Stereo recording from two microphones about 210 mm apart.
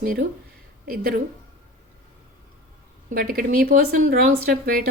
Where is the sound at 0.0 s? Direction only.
45° right (ahead or behind).